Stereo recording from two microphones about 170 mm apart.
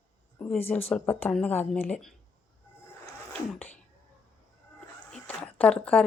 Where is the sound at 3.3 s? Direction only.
10° left (ahead or behind).